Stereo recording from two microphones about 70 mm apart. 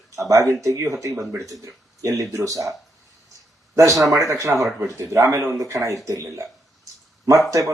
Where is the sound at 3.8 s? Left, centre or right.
Right.